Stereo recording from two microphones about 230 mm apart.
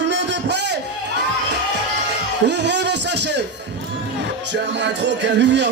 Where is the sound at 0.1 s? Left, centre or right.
Right.